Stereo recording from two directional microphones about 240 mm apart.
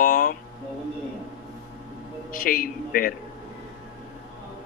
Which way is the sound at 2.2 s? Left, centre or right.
Left.